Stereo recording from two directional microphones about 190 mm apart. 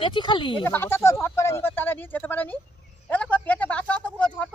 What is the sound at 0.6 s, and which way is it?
Speech, 10° left (ahead or behind).